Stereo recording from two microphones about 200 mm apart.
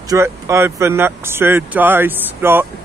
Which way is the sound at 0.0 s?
15° right (ahead or behind).